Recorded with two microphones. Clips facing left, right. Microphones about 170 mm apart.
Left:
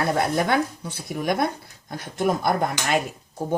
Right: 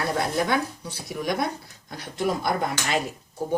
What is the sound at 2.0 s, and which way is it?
Speech, 50° left (ahead or behind).